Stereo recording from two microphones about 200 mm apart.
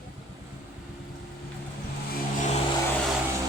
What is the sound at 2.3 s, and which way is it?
Vehicle, 35° left (ahead or behind).